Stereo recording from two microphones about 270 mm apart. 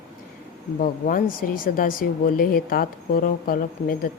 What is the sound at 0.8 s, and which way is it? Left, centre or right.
Speech, left.